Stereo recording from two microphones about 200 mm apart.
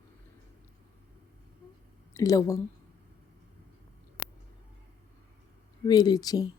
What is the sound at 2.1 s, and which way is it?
Speech, 15° left (ahead or behind).